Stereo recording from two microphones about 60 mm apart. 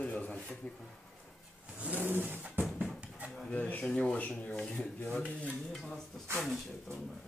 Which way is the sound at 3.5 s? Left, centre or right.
Left.